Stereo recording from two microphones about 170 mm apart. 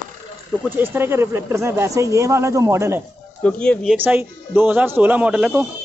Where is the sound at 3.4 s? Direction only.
5° left (ahead or behind).